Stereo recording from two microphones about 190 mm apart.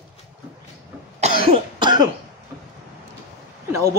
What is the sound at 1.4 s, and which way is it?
Cough, 25° right (ahead or behind).